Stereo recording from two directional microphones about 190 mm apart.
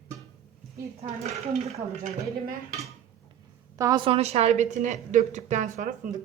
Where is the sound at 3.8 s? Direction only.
20° right (ahead or behind); by 5.8 s 40° right (ahead or behind).